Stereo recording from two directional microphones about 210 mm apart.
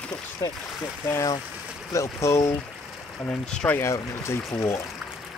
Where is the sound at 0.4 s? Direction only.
15° left (ahead or behind).